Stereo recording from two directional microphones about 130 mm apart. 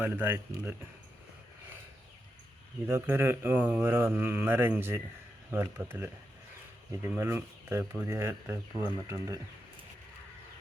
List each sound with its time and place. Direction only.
0.0 s speech: 15° right (ahead or behind)
2.8 s speech: 20° right (ahead or behind)
7.1 s speech: 15° right (ahead or behind)